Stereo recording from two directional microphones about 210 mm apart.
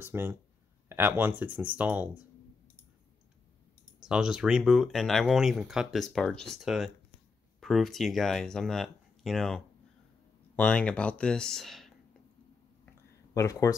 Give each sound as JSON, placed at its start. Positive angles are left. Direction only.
{"t": 0.0, "sound": "speech", "side_deg": -10}
{"t": 4.0, "sound": "speech", "side_deg": -5}
{"t": 13.3, "sound": "speech", "side_deg": 15}